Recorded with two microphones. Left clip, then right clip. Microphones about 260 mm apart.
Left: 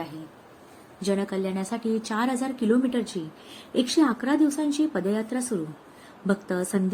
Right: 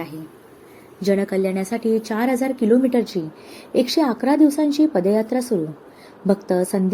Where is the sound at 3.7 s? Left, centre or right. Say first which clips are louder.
Right 4 dB; centre.